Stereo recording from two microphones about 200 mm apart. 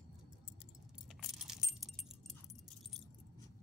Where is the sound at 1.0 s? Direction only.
Centre (ahead or behind).